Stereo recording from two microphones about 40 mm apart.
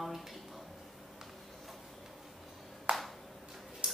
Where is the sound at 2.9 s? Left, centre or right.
Right.